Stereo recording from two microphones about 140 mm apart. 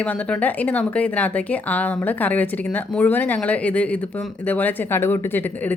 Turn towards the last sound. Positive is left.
turn(degrees=15)  # may be behind; listen again after turning